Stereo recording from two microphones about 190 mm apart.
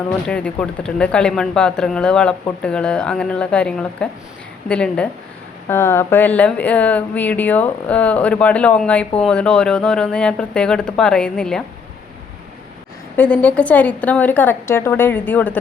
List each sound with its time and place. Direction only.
0.3 s speech: 5° left (ahead or behind)
13.1 s speech: 10° left (ahead or behind)